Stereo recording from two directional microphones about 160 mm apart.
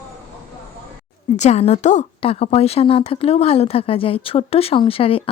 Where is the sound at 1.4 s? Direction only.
45° left (ahead or behind).